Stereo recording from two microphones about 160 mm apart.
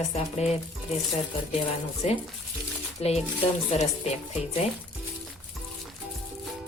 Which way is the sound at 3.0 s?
40° left (ahead or behind).